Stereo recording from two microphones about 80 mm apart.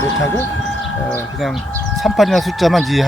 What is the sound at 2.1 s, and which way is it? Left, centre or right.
Speech, centre.